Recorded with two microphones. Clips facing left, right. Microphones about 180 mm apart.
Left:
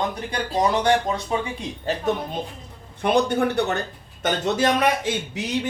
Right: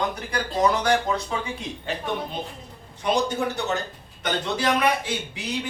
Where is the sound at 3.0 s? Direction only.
60° left (ahead or behind).